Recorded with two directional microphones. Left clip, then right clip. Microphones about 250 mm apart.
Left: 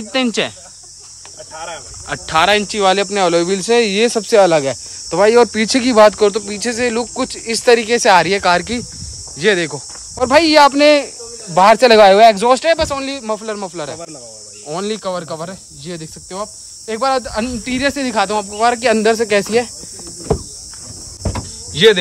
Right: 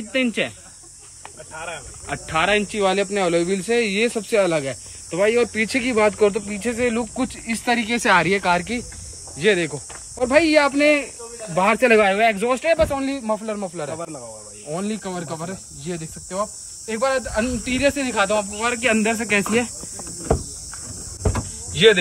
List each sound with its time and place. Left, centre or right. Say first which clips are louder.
0.1 s speech: left 5 dB; centre
2.0 s speech: left 7 dB; centre
5.3 s speech: left 8 dB; left
5.7 s speech: left 9 dB; centre
21.8 s speech: left 4 dB; centre